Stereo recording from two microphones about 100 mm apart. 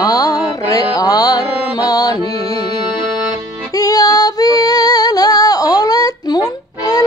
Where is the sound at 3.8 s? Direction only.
40° left (ahead or behind).